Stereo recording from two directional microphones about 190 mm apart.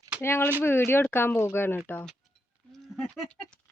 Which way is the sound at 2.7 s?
5° left (ahead or behind).